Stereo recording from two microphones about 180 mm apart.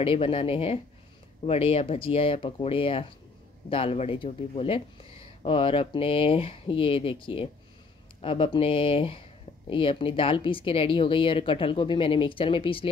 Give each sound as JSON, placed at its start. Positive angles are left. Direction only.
{"t": 0.0, "sound": "speech", "side_deg": 30}